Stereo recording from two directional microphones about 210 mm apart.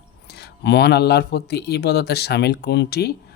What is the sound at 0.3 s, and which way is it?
Speech, 50° left (ahead or behind).